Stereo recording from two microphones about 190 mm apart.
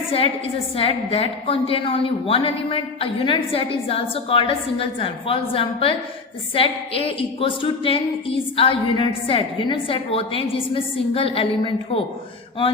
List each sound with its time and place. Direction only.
0.8 s a woman's voice: 30° left (ahead or behind)